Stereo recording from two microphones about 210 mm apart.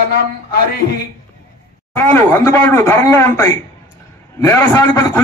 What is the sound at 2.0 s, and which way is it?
A man's voice, 10° left (ahead or behind).